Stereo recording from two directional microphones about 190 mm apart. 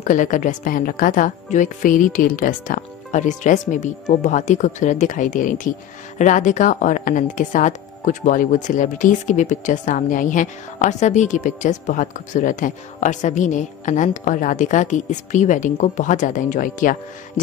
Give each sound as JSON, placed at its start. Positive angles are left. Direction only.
{"t": 0.0, "sound": "a woman's voice", "side_deg": 40}